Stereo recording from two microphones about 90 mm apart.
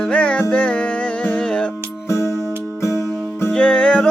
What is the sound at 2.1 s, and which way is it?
Music, 30° left (ahead or behind).